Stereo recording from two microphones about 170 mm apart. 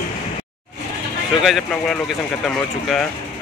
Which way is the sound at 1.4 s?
Centre (ahead or behind).